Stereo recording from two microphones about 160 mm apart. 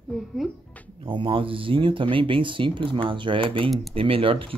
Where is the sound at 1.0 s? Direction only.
30° right (ahead or behind).